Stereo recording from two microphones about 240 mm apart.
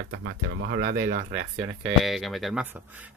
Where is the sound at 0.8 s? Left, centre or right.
Right.